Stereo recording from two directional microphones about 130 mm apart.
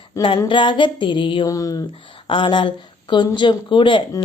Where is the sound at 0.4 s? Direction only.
40° left (ahead or behind).